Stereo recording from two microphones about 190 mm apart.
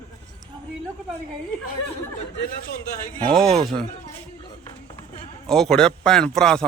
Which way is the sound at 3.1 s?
5° left (ahead or behind).